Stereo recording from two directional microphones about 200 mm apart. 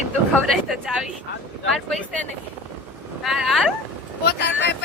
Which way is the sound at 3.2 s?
Centre (ahead or behind).